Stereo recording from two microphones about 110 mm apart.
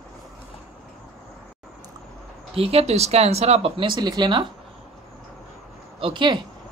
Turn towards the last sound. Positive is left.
turn(degrees=-45)  # may be behind; listen again after turning